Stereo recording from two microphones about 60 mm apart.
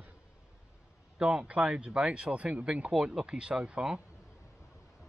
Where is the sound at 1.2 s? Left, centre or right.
Centre.